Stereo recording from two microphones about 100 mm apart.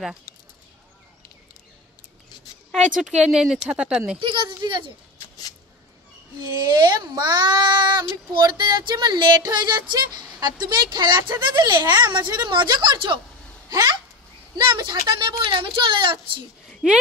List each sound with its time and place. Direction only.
2.7 s speech: 5° right (ahead or behind)
4.2 s speech: 55° right (ahead or behind)
6.4 s speech: 45° right (ahead or behind)
16.8 s speech: 10° right (ahead or behind)